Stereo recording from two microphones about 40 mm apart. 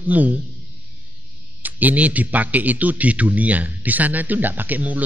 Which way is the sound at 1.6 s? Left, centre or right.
Right.